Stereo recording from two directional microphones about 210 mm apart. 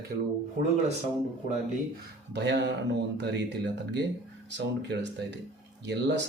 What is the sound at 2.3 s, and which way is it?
Speech, 55° right (ahead or behind).